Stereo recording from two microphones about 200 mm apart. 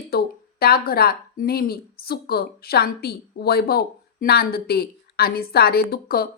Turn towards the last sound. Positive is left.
turn(degrees=50)  # may be behind; listen again after turning